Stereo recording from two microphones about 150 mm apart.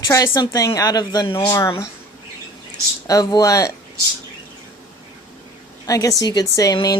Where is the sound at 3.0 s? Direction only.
25° left (ahead or behind).